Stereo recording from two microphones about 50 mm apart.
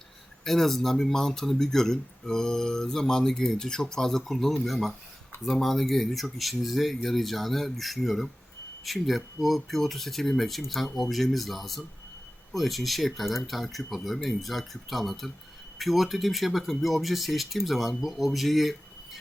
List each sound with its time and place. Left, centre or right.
0.4 s speech: centre